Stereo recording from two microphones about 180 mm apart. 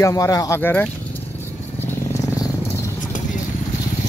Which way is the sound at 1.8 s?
15° left (ahead or behind).